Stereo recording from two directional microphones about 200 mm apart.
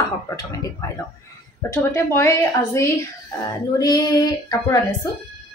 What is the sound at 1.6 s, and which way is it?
Speech, 15° left (ahead or behind).